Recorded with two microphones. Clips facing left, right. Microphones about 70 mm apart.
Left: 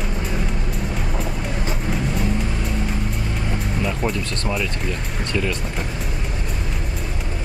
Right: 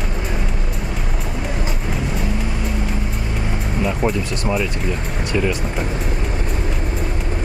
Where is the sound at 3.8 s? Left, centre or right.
Centre.